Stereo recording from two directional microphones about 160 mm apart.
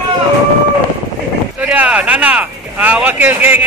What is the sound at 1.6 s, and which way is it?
Speech, 10° right (ahead or behind).